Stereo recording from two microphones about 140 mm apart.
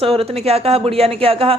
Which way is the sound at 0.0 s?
45° right (ahead or behind).